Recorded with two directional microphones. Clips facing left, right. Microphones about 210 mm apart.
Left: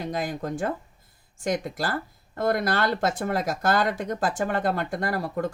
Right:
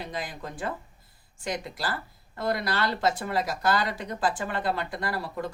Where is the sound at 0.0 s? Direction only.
45° left (ahead or behind).